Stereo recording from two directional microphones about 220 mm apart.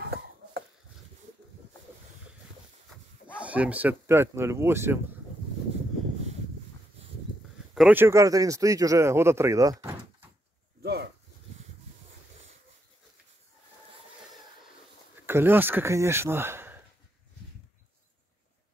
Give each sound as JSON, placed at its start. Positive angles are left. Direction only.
{"t": 3.3, "sound": "speech", "side_deg": -5}
{"t": 7.7, "sound": "speech", "side_deg": -5}
{"t": 10.8, "sound": "a sound", "side_deg": -45}
{"t": 15.2, "sound": "speech", "side_deg": -10}